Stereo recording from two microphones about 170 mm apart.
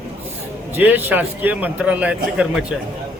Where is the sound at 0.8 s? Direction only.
10° right (ahead or behind).